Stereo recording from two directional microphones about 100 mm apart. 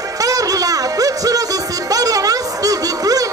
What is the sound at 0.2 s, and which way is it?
Music, 35° right (ahead or behind).